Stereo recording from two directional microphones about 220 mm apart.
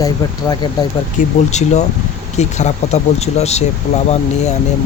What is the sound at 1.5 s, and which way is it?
Speech, 30° left (ahead or behind).